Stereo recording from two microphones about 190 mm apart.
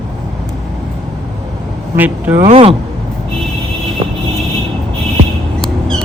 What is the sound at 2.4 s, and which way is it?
Speech, 30° right (ahead or behind).